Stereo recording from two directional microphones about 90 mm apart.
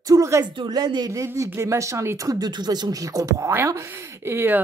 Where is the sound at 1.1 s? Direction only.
35° right (ahead or behind).